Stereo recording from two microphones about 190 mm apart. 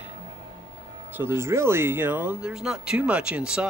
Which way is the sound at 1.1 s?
10° right (ahead or behind).